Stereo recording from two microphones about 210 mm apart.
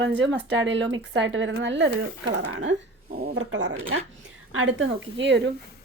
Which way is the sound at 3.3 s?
60° right (ahead or behind).